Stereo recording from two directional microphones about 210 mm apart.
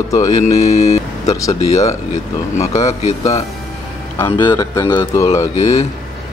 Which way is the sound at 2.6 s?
35° left (ahead or behind).